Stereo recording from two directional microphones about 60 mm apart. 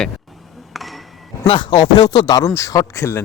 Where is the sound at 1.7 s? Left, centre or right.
Left.